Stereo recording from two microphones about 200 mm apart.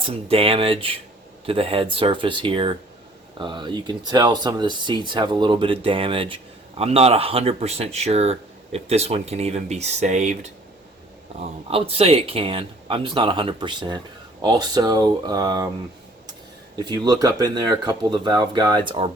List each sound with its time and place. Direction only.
0.0 s speech: 30° right (ahead or behind)
11.7 s speech: 30° right (ahead or behind)
16.7 s speech: 20° right (ahead or behind)